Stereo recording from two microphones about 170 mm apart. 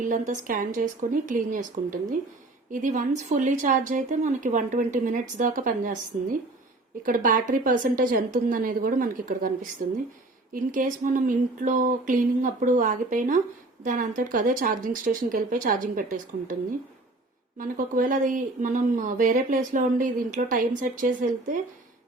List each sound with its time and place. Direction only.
0.0 s speech: 50° right (ahead or behind)
7.0 s speech: 50° right (ahead or behind)
17.6 s speech: 55° right (ahead or behind)